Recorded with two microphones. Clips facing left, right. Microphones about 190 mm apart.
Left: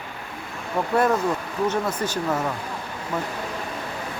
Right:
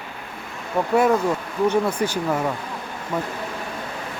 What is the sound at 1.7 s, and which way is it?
Speech, 10° right (ahead or behind).